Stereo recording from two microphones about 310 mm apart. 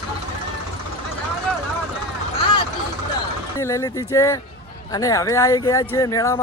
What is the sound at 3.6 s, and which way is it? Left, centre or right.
Speech, centre.